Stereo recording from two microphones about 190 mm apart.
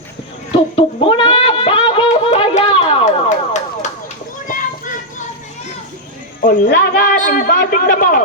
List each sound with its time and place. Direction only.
0.8 s a sound: 30° left (ahead or behind)
4.4 s children playing: 45° left (ahead or behind)
6.4 s a man's voice: 45° left (ahead or behind)